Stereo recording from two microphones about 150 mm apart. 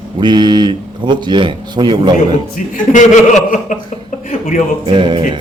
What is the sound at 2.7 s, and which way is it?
A man's voice, 55° left (ahead or behind).